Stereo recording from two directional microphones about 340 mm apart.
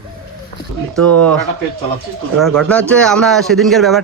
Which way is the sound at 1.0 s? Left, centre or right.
Right.